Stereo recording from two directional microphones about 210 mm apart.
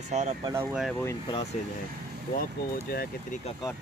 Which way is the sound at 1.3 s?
30° left (ahead or behind).